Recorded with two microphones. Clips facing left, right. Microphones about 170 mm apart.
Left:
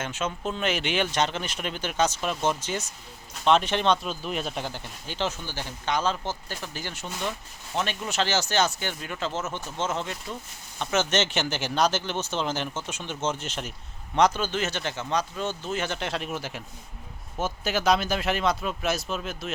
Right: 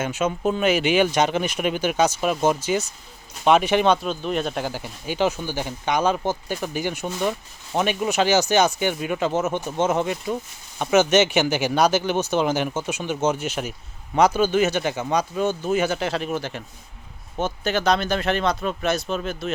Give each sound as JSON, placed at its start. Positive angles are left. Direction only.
{"t": 0.0, "sound": "speech", "side_deg": -10}